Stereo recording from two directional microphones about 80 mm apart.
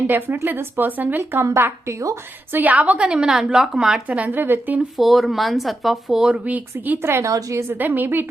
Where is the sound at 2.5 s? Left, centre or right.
Right.